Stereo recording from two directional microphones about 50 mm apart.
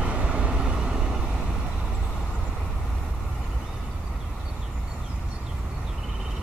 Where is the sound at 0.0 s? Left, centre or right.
Right.